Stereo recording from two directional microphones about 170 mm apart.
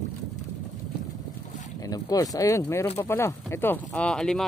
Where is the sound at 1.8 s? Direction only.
20° left (ahead or behind).